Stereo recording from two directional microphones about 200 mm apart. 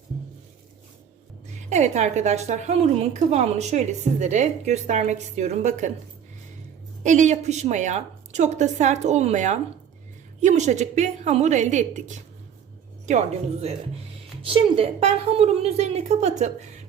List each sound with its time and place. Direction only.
1.7 s a woman's voice: 35° right (ahead or behind)
7.0 s a woman's voice: 35° right (ahead or behind)